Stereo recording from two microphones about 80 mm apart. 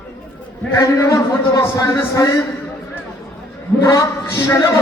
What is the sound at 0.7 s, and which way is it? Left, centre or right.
A man's voice, left.